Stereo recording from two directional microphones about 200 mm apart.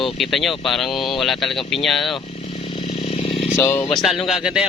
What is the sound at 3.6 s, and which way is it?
Speech, 10° left (ahead or behind).